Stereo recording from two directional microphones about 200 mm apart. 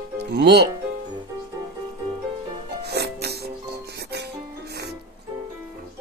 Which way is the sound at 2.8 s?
55° right (ahead or behind).